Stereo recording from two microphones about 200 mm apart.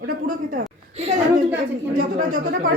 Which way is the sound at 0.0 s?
40° right (ahead or behind).